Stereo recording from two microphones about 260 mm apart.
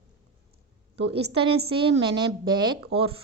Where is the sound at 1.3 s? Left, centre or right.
Right.